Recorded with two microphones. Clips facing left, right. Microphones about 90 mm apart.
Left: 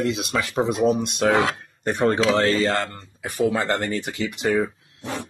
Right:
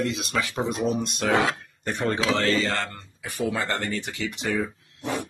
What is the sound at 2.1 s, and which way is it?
Speech, 30° left (ahead or behind).